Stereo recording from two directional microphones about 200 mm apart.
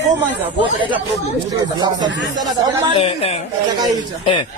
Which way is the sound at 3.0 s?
30° left (ahead or behind).